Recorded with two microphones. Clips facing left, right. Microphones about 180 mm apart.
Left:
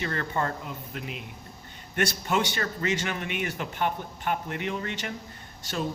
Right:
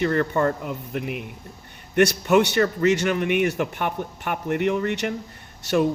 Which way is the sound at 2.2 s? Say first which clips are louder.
Right 9 dB; 65° right (ahead or behind).